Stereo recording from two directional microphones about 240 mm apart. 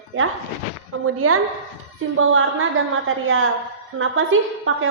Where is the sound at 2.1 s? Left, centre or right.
Right.